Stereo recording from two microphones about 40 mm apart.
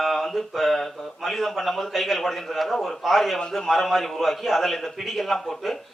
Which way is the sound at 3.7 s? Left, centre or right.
Centre.